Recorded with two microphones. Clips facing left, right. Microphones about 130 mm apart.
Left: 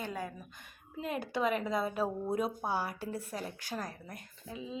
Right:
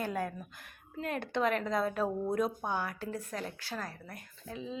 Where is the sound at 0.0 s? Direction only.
Centre (ahead or behind).